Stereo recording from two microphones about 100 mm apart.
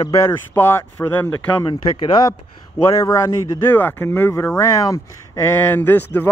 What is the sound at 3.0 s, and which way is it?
Speech, 30° left (ahead or behind).